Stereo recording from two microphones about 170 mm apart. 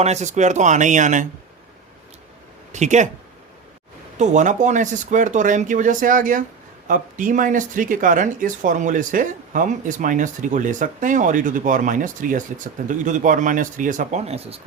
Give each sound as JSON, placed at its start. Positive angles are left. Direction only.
{"t": 0.0, "sound": "speech", "side_deg": -40}
{"t": 2.7, "sound": "speech", "side_deg": -45}
{"t": 4.2, "sound": "speech", "side_deg": -45}